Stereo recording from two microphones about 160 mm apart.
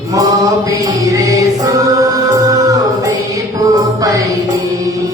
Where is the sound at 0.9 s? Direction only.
20° right (ahead or behind).